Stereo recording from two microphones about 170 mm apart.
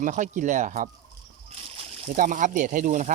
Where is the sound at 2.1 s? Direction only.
50° right (ahead or behind).